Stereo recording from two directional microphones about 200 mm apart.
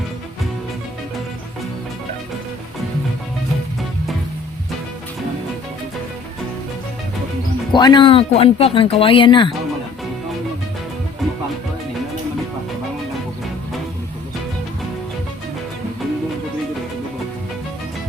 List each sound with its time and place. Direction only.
7.7 s speech: 20° left (ahead or behind)